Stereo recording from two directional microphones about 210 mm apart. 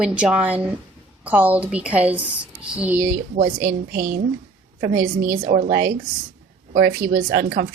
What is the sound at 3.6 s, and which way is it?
Speech, 45° right (ahead or behind).